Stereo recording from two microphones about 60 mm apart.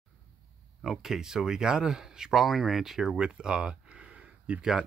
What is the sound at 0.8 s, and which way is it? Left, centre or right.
Speech, centre.